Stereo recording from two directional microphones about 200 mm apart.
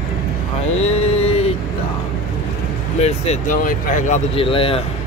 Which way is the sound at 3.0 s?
35° left (ahead or behind).